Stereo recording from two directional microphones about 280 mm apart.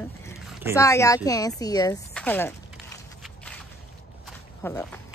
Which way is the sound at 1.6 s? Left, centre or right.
Centre.